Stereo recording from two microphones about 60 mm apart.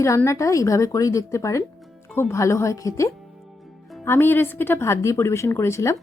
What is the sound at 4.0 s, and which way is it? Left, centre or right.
Speech, left.